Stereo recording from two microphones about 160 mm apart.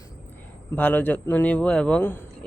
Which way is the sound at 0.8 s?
10° left (ahead or behind).